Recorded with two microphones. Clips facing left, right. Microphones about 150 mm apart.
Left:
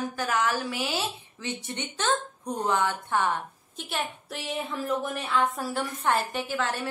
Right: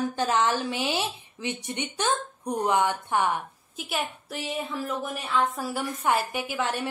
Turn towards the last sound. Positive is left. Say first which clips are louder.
# right 1 dB
turn(degrees=-15)  # may be behind; listen again after turning